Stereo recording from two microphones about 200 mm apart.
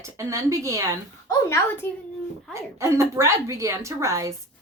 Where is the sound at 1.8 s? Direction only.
10° left (ahead or behind).